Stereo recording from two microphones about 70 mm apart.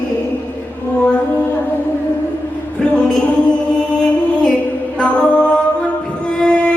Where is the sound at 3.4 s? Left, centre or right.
Centre.